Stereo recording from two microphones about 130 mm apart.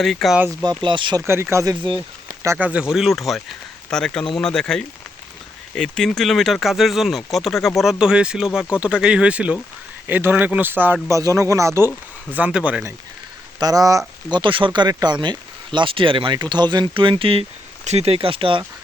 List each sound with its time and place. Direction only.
0.0 s speech: centre (ahead or behind)
0.6 s speech: 35° right (ahead or behind)
1.3 s speech: 20° right (ahead or behind)
2.6 s speech: 5° right (ahead or behind)
11.1 s speech: 25° right (ahead or behind)
12.3 s speech: 10° right (ahead or behind)
13.6 s speech: 30° right (ahead or behind)
14.3 s speech: 35° right (ahead or behind)